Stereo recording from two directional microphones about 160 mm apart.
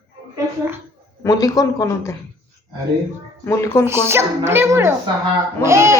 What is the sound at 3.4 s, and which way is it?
Speech, 20° left (ahead or behind).